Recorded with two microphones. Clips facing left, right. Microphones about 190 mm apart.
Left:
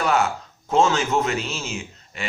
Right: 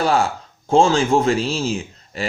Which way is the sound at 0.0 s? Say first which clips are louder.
Right 3 dB; 30° right (ahead or behind).